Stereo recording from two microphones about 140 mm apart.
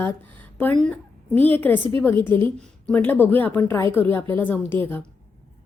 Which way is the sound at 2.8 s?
15° left (ahead or behind).